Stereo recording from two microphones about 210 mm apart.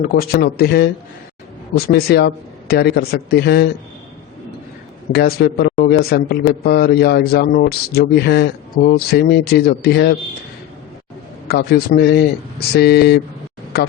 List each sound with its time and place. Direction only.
0.1 s speech: 45° left (ahead or behind)
1.9 s speech: 50° left (ahead or behind)
5.1 s speech: 50° left (ahead or behind)
11.4 s speech: 50° left (ahead or behind)